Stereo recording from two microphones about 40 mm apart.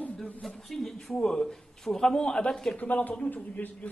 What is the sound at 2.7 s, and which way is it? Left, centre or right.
A man's voice, left.